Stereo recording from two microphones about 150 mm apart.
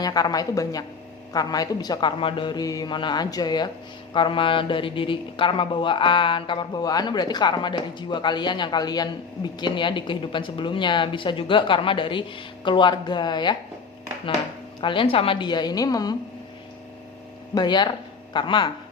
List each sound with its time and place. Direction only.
0.0 s a man's voice: 25° left (ahead or behind)
14.8 s a man's voice: 35° left (ahead or behind)
17.5 s a man's voice: 30° left (ahead or behind)